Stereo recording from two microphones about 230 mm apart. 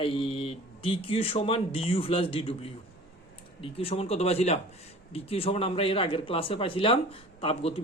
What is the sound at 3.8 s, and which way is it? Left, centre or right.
Speech, left.